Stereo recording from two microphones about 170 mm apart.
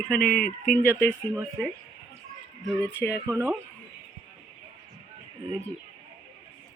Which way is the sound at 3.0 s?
15° left (ahead or behind).